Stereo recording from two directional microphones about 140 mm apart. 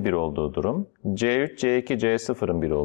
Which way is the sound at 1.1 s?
20° left (ahead or behind).